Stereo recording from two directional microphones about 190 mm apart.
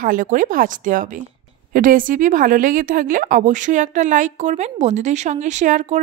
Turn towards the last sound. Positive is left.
turn(degrees=-40)  # may be behind; listen again after turning